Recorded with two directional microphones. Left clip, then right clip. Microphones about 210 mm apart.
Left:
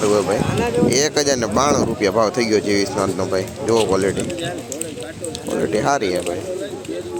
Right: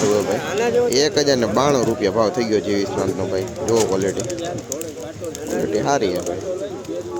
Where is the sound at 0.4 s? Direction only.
55° right (ahead or behind).